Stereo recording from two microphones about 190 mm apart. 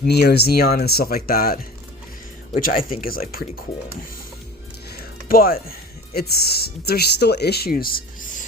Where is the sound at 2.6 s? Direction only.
50° left (ahead or behind).